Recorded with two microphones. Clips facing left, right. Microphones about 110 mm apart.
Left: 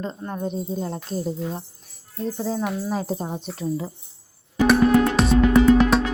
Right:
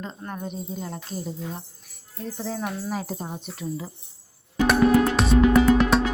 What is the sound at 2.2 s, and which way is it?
Speech, 20° left (ahead or behind).